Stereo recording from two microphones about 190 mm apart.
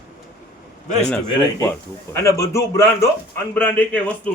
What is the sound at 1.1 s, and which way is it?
A man's voice, 5° left (ahead or behind).